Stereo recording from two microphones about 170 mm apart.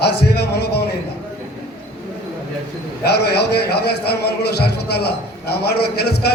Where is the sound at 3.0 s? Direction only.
70° left (ahead or behind).